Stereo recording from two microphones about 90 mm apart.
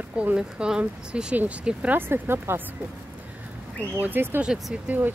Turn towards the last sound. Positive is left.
turn(degrees=-20)  # may be behind; listen again after turning